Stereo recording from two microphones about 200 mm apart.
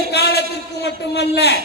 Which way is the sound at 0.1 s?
55° left (ahead or behind).